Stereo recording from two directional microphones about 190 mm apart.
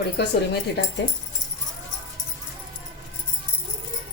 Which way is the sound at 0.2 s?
60° left (ahead or behind).